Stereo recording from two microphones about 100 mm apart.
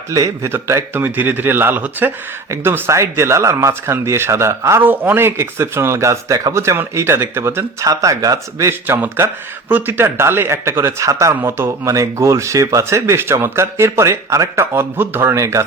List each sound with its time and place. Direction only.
0.1 s speech: 30° right (ahead or behind)